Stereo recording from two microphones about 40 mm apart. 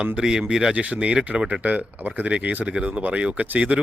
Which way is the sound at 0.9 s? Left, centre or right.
Right.